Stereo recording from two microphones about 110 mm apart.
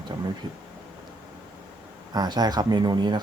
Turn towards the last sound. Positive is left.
turn(degrees=-40)  # may be behind; listen again after turning